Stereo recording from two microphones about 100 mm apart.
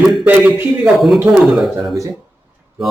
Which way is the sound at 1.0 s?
Centre (ahead or behind).